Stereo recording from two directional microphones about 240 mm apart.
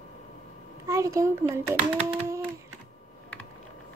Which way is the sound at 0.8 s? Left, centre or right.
Centre.